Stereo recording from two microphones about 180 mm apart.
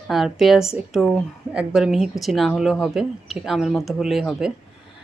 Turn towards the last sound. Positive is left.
turn(degrees=0)  # may be behind; listen again after turning